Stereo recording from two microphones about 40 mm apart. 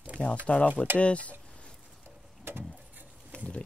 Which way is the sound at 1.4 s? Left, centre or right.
Left.